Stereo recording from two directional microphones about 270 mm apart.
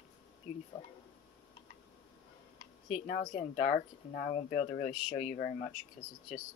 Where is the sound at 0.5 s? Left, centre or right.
Left.